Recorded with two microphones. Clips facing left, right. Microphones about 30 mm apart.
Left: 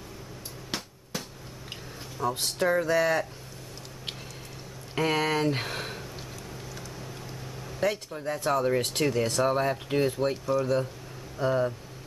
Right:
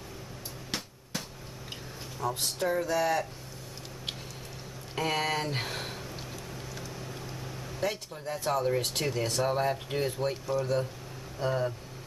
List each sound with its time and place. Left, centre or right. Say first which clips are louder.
0.7 s a sound: left 2 dB; centre
2.3 s speech: left 4 dB; left
4.9 s speech: left 4 dB; centre
8.5 s speech: left 3 dB; centre